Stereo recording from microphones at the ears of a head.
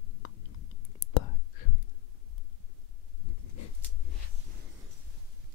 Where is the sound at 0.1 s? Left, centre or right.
Left.